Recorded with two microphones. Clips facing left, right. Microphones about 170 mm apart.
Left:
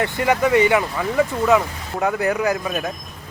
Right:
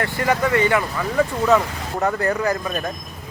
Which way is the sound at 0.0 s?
15° left (ahead or behind).